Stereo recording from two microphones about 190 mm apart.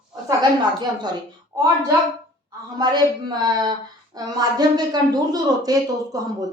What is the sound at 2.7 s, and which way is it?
A woman's voice, 20° right (ahead or behind).